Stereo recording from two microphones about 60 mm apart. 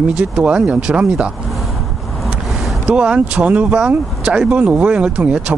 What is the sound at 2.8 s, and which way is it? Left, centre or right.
Speech, centre.